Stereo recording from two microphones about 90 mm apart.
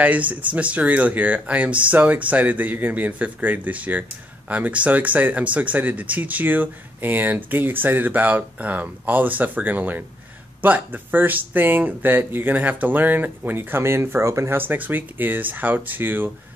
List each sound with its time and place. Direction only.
0.0 s speech: 15° right (ahead or behind)